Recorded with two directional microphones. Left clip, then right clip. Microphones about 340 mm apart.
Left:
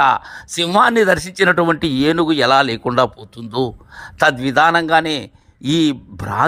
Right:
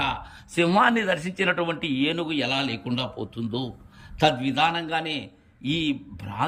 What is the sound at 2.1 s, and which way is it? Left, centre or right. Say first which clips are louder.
A man's voice: left 17 dB; centre.